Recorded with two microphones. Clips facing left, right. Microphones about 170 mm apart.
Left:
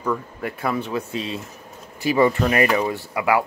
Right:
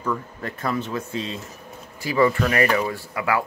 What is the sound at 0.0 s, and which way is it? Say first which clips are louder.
Speech: left 2 dB; 10° left (ahead or behind).